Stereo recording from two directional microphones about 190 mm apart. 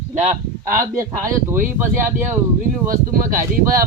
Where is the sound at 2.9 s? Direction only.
45° right (ahead or behind).